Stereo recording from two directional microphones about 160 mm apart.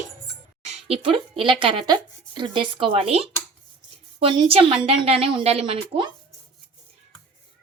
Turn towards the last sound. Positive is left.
turn(degrees=-35)  # may be behind; listen again after turning